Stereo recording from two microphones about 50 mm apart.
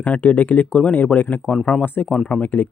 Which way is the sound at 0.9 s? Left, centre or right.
Left.